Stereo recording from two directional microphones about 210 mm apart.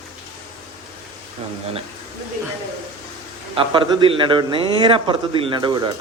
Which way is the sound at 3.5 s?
25° right (ahead or behind).